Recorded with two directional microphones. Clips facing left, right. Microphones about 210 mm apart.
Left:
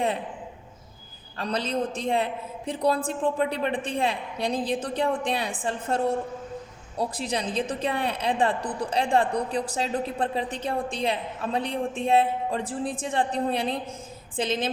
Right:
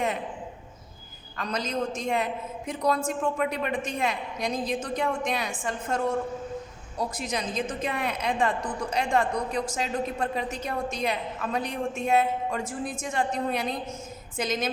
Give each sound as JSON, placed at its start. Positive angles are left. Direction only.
{"t": 1.4, "sound": "a woman's voice", "side_deg": 30}